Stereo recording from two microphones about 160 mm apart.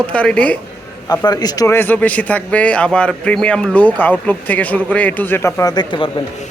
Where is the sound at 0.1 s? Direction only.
5° left (ahead or behind).